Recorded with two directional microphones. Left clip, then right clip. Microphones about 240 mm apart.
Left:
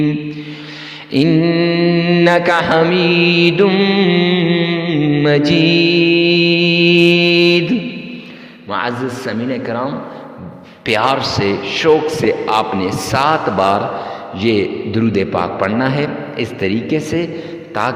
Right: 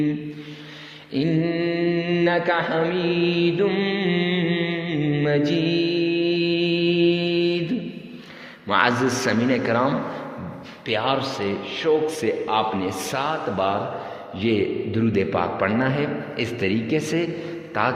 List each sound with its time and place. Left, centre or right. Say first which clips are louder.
1.1 s mantra: left 10 dB; left
8.7 s speech: even; centre
10.8 s a man's voice: left 8 dB; left